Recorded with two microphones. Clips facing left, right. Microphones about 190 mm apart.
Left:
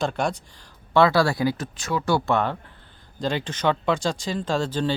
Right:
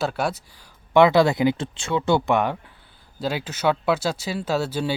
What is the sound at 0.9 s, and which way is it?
Speech, 20° right (ahead or behind).